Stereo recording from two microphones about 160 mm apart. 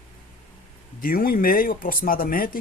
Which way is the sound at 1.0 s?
65° left (ahead or behind).